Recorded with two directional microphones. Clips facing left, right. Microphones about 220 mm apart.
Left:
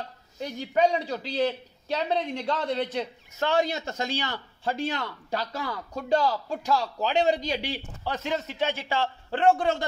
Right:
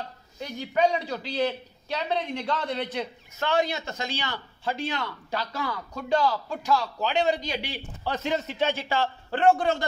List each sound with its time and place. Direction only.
0.4 s a man's voice: 40° left (ahead or behind)
8.2 s a man's voice: 10° left (ahead or behind)